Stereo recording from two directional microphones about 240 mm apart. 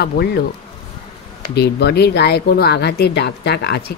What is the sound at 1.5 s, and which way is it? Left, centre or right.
Speech, left.